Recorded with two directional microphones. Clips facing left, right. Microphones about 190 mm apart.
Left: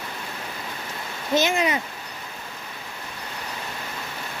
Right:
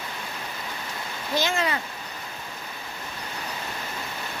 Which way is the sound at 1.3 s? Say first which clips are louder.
Left 4 dB; 20° left (ahead or behind).